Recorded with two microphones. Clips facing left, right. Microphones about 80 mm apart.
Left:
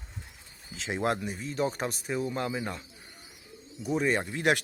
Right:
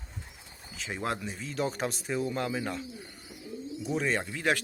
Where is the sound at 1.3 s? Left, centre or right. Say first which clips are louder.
Left 2 dB; centre.